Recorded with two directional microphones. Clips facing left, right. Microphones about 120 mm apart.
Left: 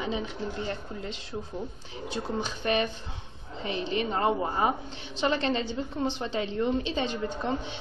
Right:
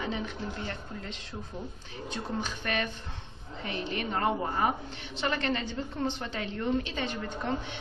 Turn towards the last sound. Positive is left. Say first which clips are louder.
# left 2 dB
turn(degrees=20)  # may be behind; listen again after turning